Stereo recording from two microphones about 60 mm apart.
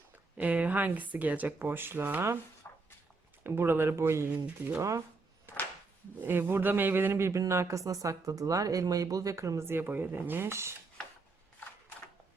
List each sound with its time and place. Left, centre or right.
0.3 s speech: right
2.6 s a sound: left
3.4 s speech: right
4.8 s speech: right
6.2 s speech: right
9.6 s speech: right